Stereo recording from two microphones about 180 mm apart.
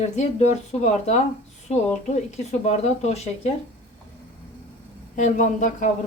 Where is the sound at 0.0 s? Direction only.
35° left (ahead or behind).